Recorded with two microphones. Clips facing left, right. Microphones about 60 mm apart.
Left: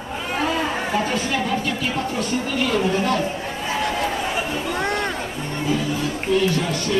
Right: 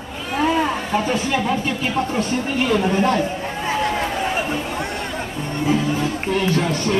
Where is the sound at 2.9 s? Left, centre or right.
Right.